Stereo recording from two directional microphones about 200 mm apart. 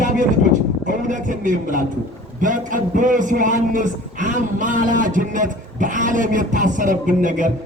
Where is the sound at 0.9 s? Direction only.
40° right (ahead or behind).